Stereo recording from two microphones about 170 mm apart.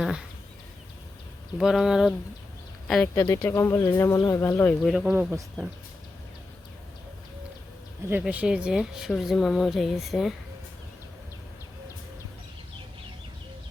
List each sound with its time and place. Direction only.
0.0 s a sound: 5° right (ahead or behind)
1.5 s speech: centre (ahead or behind)
3.2 s speech: 20° left (ahead or behind)
4.8 s speech: centre (ahead or behind)
8.2 s speech: 5° right (ahead or behind)